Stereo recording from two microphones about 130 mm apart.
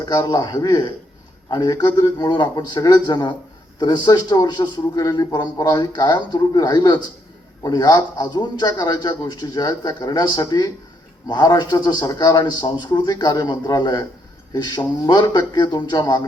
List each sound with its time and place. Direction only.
0.0 s speech: 30° left (ahead or behind)